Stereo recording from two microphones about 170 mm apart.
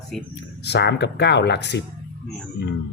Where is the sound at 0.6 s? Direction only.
85° left.